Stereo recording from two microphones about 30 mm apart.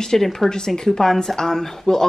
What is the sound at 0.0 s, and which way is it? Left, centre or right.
Speech, centre.